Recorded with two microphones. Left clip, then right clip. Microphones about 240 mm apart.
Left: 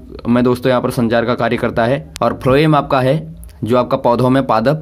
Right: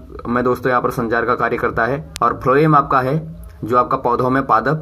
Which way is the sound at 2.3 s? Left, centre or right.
Left.